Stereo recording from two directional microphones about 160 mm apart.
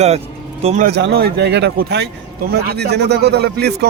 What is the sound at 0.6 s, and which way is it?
Speech, 45° right (ahead or behind).